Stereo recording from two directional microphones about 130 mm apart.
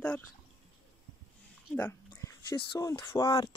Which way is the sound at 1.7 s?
15° left (ahead or behind).